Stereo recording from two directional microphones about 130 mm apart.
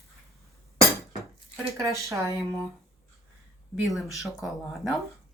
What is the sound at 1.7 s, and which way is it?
Speech, 25° right (ahead or behind).